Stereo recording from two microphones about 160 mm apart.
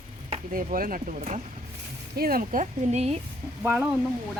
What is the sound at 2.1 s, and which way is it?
Speech, 70° right (ahead or behind).